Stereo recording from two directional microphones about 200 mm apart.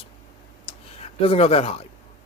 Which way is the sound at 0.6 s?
30° left (ahead or behind).